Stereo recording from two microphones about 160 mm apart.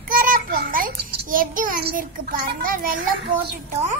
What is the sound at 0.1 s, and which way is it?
Child singing, 60° right (ahead or behind).